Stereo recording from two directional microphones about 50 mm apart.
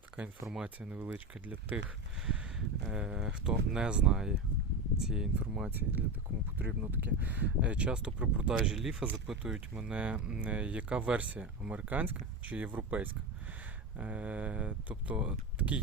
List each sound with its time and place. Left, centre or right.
0.6 s speech: right
2.2 s speech: centre
5.7 s speech: right